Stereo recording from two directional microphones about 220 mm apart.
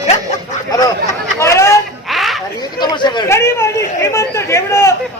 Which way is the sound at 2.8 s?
20° left (ahead or behind).